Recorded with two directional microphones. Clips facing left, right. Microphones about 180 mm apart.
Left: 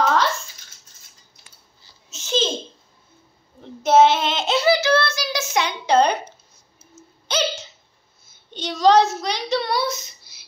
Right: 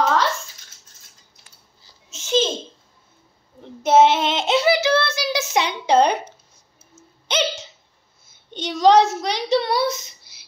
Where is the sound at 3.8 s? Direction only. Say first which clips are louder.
Even; 20° right (ahead or behind).